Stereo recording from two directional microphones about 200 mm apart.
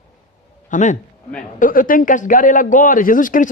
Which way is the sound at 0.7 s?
35° left (ahead or behind).